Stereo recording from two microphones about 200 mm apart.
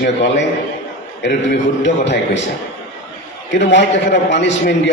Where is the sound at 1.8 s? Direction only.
65° left (ahead or behind).